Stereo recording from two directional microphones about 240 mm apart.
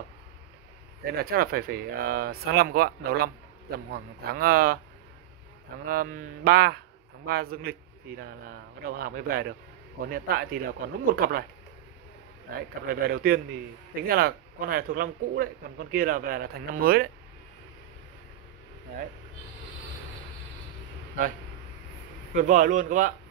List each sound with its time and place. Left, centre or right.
1.1 s speech: right
5.9 s speech: right
8.8 s speech: right
12.8 s speech: right
22.3 s speech: right